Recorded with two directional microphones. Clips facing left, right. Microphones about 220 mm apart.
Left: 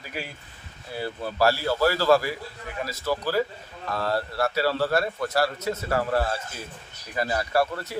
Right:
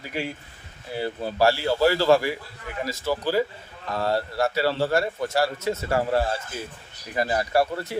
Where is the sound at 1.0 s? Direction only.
20° right (ahead or behind).